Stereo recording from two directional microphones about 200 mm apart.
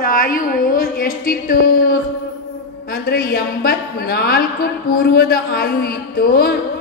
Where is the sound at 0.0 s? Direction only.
45° left (ahead or behind).